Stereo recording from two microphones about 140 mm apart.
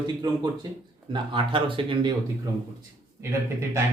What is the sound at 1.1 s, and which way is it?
Speech, 35° right (ahead or behind).